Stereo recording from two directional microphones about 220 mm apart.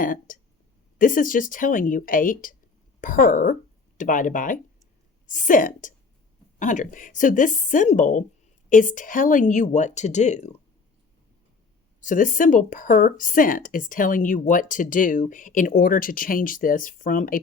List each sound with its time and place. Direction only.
0.0 s speech: 40° left (ahead or behind)
11.9 s speech: 35° left (ahead or behind)